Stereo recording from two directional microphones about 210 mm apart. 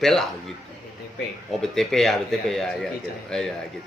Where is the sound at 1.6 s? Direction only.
Centre (ahead or behind).